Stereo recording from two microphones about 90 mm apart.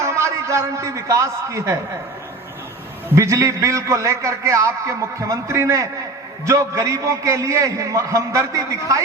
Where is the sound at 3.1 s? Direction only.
35° right (ahead or behind).